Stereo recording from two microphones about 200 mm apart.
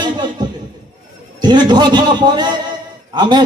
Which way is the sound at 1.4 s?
20° right (ahead or behind).